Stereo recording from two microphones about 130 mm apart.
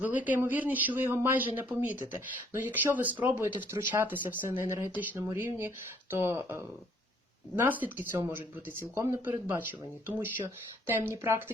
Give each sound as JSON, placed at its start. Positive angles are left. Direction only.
{"t": 0.0, "sound": "speech", "side_deg": -10}